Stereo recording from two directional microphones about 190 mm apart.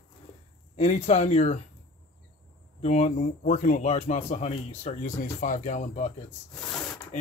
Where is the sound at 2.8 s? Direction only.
35° left (ahead or behind).